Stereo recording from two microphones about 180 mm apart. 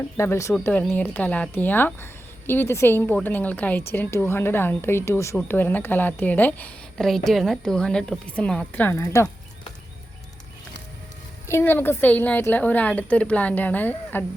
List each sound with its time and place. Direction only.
0.2 s a woman's voice: 15° left (ahead or behind)
11.4 s a woman's voice: 15° left (ahead or behind)